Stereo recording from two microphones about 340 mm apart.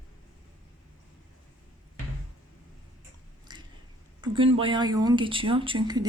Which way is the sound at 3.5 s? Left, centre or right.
Centre.